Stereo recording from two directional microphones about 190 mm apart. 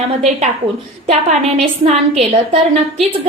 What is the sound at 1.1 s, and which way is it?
A woman's voice, 35° right (ahead or behind).